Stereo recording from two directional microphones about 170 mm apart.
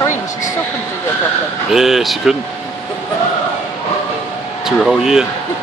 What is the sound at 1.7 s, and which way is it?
Speech, centre (ahead or behind).